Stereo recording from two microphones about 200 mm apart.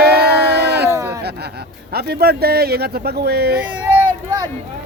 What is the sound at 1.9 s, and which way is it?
Speech, 50° right (ahead or behind).